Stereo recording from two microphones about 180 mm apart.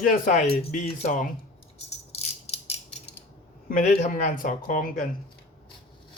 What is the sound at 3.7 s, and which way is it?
Speech, 45° left (ahead or behind).